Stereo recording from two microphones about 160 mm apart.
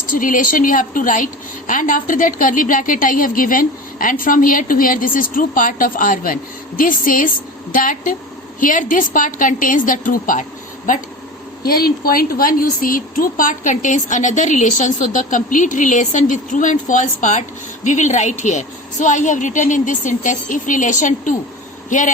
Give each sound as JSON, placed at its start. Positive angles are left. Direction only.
{"t": 0.1, "sound": "a woman's voice", "side_deg": 55}
{"t": 11.6, "sound": "speech", "side_deg": 70}